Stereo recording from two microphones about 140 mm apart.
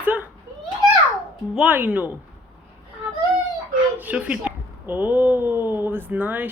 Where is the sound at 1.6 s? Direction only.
10° right (ahead or behind).